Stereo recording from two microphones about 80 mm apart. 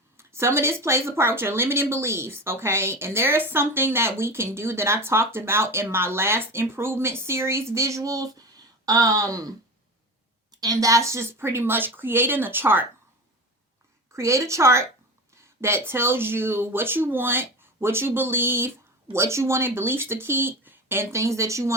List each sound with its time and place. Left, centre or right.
0.2 s speech: right
14.1 s speech: right